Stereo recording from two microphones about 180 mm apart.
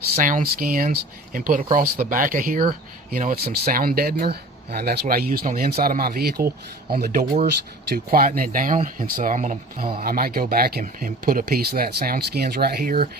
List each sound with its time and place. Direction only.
0.2 s speech: 50° right (ahead or behind)